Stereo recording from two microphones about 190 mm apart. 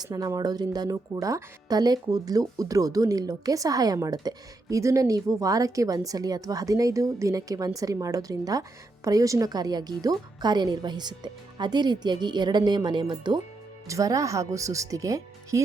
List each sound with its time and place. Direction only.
0.0 s speech: 20° right (ahead or behind)